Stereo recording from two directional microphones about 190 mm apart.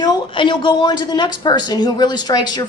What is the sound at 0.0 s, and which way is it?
A woman's voice, 20° left (ahead or behind).